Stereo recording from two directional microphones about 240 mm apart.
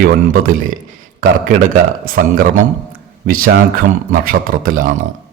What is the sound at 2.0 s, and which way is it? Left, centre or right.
A man's voice, right.